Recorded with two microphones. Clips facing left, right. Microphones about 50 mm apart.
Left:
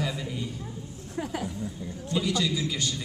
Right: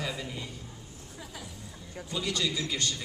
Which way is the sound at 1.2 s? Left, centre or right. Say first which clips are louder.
Left 13 dB; left.